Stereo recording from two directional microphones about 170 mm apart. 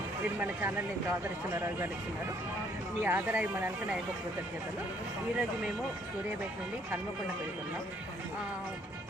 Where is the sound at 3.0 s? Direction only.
15° right (ahead or behind).